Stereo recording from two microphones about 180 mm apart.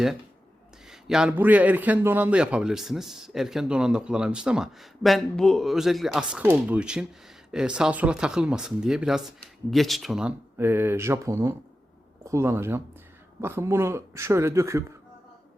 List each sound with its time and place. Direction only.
0.9 s a man's voice: 5° right (ahead or behind)